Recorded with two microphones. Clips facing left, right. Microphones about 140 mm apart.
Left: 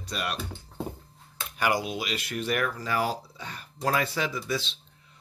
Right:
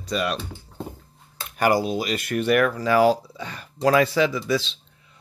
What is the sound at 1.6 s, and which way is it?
Speech, 35° right (ahead or behind).